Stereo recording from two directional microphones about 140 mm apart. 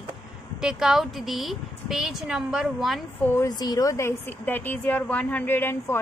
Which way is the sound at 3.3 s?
25° left (ahead or behind).